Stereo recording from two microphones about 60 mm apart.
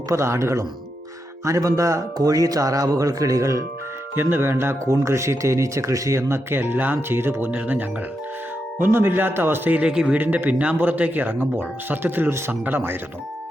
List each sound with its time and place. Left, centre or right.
0.1 s speech: right
1.5 s speech: right
4.1 s speech: right
8.8 s speech: right
9.6 s speech: right
9.9 s speech: centre
10.2 s speech: right